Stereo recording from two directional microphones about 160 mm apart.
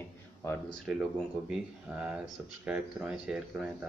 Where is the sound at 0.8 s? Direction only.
5° right (ahead or behind).